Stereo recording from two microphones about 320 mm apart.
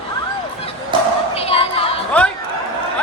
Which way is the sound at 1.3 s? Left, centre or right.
Centre.